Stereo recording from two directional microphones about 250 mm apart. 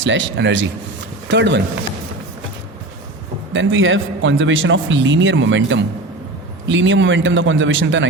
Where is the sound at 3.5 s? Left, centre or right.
Right.